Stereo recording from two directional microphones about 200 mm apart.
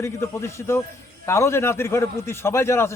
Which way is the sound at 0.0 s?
15° left (ahead or behind).